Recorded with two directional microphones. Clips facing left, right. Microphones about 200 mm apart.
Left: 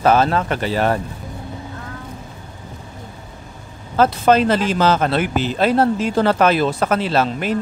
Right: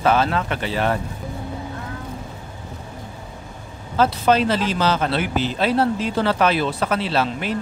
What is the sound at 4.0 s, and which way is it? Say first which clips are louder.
Speech: left 3 dB; 50° left (ahead or behind).